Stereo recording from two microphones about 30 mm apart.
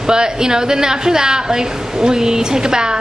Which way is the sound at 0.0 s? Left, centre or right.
Right.